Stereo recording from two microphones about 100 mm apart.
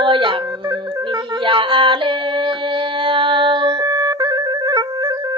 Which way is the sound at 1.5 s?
60° right (ahead or behind).